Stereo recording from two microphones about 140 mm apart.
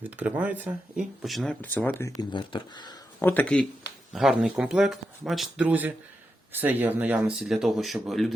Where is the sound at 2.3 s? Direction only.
35° left (ahead or behind).